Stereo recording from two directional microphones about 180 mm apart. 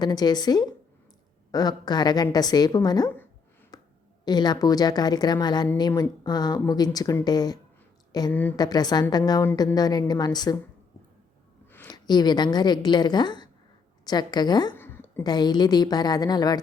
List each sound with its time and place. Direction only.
0.0 s speech: 25° left (ahead or behind)
3.7 s a sound: 20° left (ahead or behind)
4.3 s speech: 25° left (ahead or behind)
8.3 s a woman's voice: 10° left (ahead or behind)
8.5 s speech: 20° left (ahead or behind)
11.7 s a sound: 10° left (ahead or behind)
12.0 s speech: 25° left (ahead or behind)
14.8 s a sound: 10° left (ahead or behind)
15.2 s speech: 25° left (ahead or behind)